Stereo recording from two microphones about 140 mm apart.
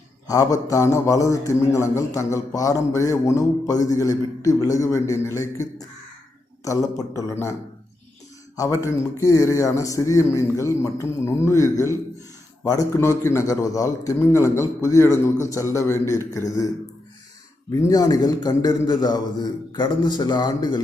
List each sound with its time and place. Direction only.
0.3 s a man's voice: 25° left (ahead or behind)
8.5 s a man's voice: 25° left (ahead or behind)